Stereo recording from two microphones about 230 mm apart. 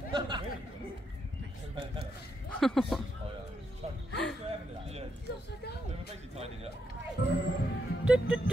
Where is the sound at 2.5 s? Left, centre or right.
Centre.